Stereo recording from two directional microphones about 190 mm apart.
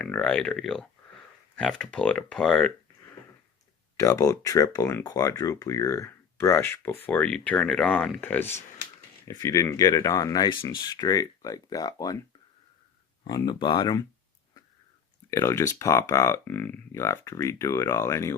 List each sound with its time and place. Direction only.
0.0 s speech: 5° left (ahead or behind)
3.9 s speech: 15° left (ahead or behind)
13.2 s speech: 20° left (ahead or behind)
15.3 s speech: 15° left (ahead or behind)